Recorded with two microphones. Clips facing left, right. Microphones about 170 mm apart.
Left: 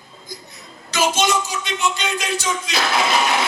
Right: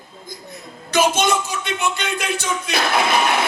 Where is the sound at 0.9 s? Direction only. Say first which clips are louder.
Right 2 dB; 55° right (ahead or behind).